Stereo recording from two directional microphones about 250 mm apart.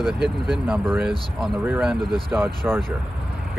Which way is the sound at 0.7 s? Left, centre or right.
Centre.